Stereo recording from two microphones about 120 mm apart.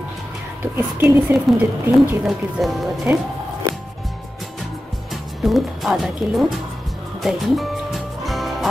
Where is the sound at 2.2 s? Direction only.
Centre (ahead or behind).